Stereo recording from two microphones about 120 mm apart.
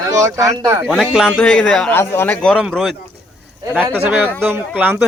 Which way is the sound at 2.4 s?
Centre (ahead or behind).